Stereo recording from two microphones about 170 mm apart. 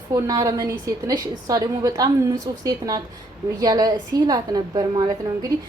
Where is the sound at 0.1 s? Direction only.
20° right (ahead or behind).